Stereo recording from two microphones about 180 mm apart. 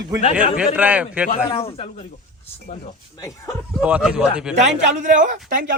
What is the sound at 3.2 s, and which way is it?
Speech, 20° left (ahead or behind).